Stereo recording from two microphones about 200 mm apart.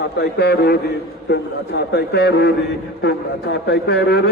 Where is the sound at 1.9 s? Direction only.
55° left (ahead or behind).